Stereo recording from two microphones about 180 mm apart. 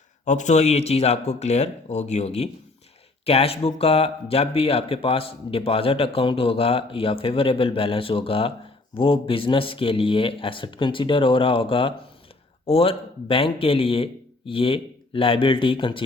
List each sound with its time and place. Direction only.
0.3 s speech: 40° left (ahead or behind)